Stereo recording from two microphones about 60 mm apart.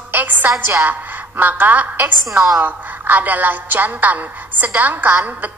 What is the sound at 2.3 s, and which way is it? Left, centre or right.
Speech, right.